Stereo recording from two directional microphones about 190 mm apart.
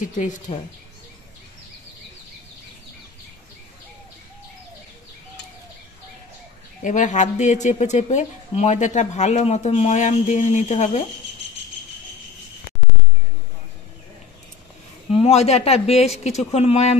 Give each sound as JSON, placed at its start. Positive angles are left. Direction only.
{"t": 0.0, "sound": "speech", "side_deg": 40}
{"t": 6.8, "sound": "speech", "side_deg": 40}
{"t": 15.1, "sound": "speech", "side_deg": 35}